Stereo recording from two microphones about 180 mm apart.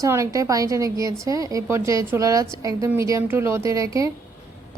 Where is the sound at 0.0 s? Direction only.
15° right (ahead or behind).